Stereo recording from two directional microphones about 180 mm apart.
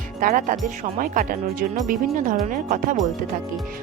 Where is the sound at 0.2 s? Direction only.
45° right (ahead or behind).